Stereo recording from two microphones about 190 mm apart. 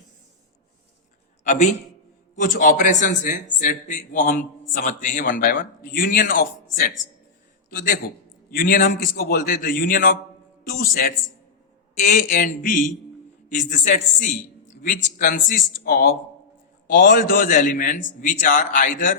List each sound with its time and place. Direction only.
1.5 s a man's voice: 40° left (ahead or behind)